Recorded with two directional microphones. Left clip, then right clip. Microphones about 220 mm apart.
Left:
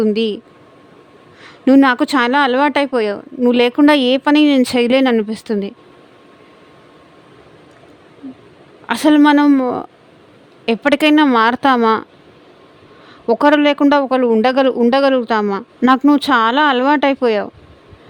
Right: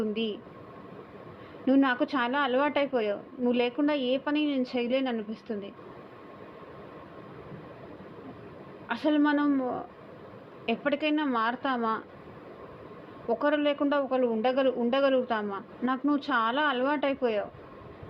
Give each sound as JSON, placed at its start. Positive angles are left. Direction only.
{"t": 0.0, "sound": "speech", "side_deg": 55}
{"t": 1.6, "sound": "speech", "side_deg": 65}
{"t": 8.9, "sound": "speech", "side_deg": 65}
{"t": 13.2, "sound": "speech", "side_deg": 60}